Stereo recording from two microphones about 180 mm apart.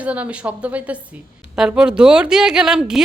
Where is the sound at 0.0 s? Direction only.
5° right (ahead or behind).